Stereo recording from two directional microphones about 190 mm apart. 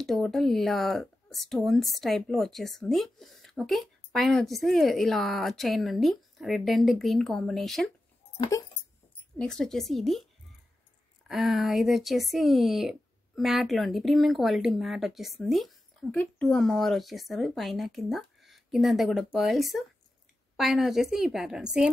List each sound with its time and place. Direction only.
0.0 s speech: centre (ahead or behind)
8.4 s speech: 20° left (ahead or behind)
9.4 s speech: 5° left (ahead or behind)
11.2 s speech: centre (ahead or behind)